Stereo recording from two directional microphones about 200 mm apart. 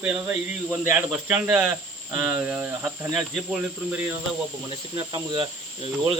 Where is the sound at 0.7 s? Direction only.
10° right (ahead or behind).